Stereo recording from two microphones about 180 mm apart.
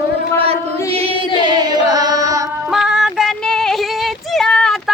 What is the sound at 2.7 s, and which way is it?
Female singing, 5° right (ahead or behind).